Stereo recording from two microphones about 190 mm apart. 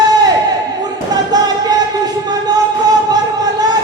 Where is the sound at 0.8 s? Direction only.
20° right (ahead or behind).